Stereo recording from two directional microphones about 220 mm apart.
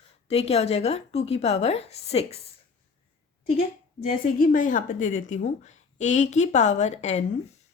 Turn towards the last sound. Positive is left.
turn(degrees=30)  # may be behind; listen again after turning